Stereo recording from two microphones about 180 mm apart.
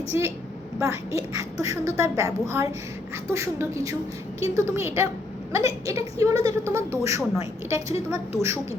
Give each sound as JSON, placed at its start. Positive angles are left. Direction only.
{"t": 0.1, "sound": "a woman's voice", "side_deg": -10}